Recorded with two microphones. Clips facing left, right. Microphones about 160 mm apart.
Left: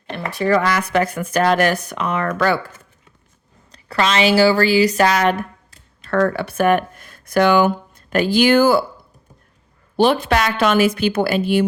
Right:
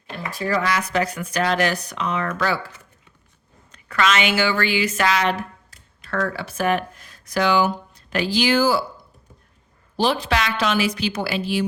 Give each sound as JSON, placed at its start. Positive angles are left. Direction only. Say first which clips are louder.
{"t": 0.1, "sound": "speech", "louder": "left 6 dB", "side_deg": 70}
{"t": 3.7, "sound": "speech", "louder": "left 2 dB", "side_deg": 35}
{"t": 6.1, "sound": "speech", "louder": "left 7 dB", "side_deg": 60}
{"t": 10.0, "sound": "speech", "louder": "left 5 dB", "side_deg": 55}